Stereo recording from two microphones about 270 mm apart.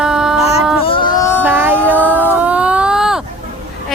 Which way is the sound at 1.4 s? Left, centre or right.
Centre.